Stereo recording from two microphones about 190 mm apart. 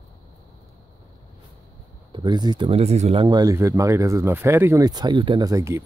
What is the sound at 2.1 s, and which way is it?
Speech, 25° right (ahead or behind).